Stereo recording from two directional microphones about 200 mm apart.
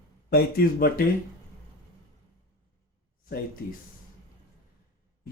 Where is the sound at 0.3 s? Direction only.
50° left (ahead or behind).